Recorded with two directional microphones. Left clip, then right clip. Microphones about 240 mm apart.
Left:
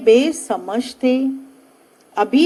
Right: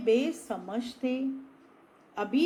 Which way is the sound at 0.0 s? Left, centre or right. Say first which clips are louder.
Left 13 dB; left.